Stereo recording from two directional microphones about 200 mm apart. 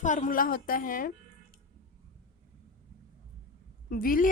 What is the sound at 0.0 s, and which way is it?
A woman's voice, 40° left (ahead or behind).